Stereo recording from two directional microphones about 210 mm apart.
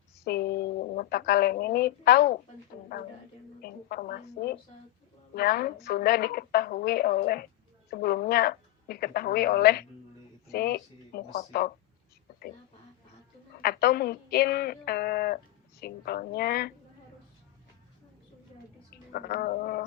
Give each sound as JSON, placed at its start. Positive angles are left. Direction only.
{"t": 0.3, "sound": "speech", "side_deg": 50}
{"t": 3.6, "sound": "speech", "side_deg": 45}
{"t": 13.6, "sound": "speech", "side_deg": 50}
{"t": 18.9, "sound": "a sound", "side_deg": 45}